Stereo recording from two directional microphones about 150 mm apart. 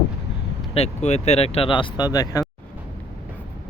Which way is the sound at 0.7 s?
45° left (ahead or behind).